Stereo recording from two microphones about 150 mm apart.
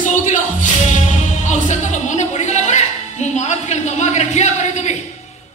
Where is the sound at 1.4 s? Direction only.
50° left (ahead or behind).